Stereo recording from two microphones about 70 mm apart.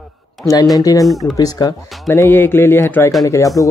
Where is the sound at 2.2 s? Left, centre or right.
Left.